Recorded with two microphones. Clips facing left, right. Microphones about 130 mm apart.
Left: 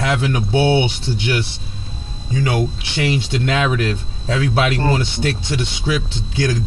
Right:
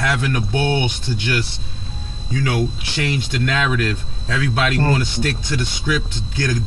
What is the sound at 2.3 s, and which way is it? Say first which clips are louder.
Speech: left 1 dB; 25° left (ahead or behind).